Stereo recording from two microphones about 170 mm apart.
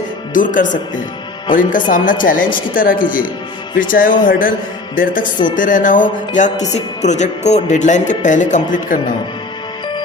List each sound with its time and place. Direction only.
0.3 s music: 50° left (ahead or behind)
5.5 s music: 50° left (ahead or behind)